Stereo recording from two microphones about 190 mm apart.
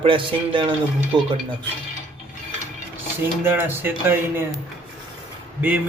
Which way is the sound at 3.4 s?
10° right (ahead or behind).